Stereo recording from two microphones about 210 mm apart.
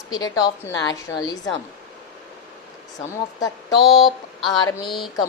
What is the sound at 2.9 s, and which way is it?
A woman's voice, 20° left (ahead or behind).